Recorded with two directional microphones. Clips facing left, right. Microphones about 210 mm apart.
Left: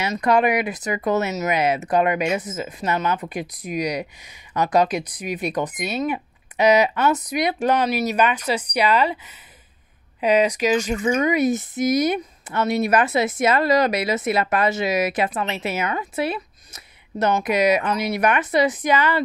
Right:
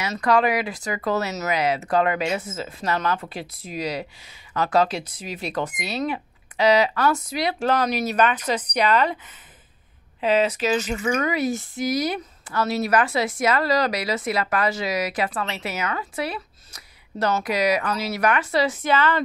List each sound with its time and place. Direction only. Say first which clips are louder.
0.1 s speech: left 1 dB; 20° left (ahead or behind)